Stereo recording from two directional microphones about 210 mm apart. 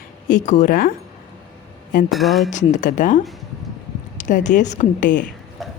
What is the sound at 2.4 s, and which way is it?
Speech, 35° left (ahead or behind).